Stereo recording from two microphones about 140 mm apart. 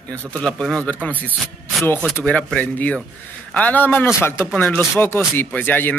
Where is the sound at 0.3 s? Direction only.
10° left (ahead or behind).